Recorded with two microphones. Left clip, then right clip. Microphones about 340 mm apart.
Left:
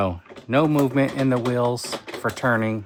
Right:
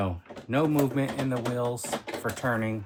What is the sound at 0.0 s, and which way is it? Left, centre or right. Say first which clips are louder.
Speech: left 7 dB; left.